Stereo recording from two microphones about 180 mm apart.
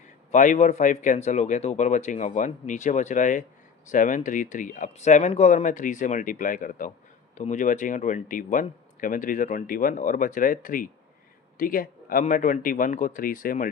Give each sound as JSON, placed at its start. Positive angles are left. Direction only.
{"t": 0.3, "sound": "speech", "side_deg": 45}